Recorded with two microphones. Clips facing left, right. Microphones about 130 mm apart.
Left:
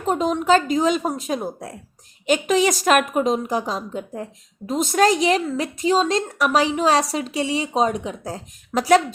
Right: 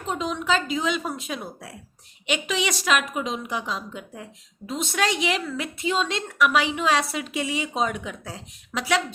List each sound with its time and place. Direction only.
0.0 s a woman's voice: 45° left (ahead or behind)